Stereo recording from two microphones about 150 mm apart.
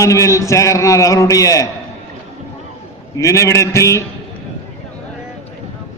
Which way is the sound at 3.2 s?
20° left (ahead or behind).